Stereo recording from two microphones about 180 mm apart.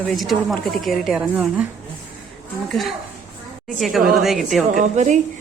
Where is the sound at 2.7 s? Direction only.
Centre (ahead or behind).